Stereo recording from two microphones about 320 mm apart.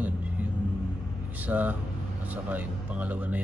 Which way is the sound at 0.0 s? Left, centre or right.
Centre.